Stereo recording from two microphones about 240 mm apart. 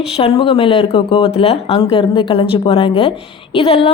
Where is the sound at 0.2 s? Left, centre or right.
Left.